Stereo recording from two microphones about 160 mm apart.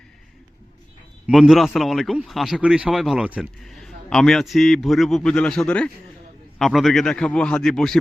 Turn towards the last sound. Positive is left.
turn(degrees=5)  # may be behind; listen again after turning